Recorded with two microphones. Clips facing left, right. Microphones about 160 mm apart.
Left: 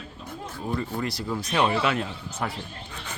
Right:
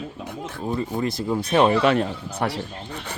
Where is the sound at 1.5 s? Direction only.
40° right (ahead or behind).